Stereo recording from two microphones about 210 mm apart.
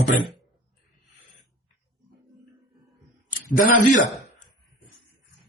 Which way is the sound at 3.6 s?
40° left (ahead or behind).